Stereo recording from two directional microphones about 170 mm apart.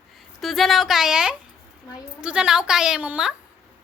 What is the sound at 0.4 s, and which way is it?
A woman's voice, centre (ahead or behind).